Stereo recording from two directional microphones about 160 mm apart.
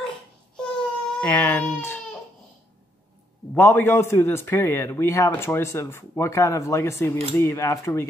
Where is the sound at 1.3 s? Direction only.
15° left (ahead or behind).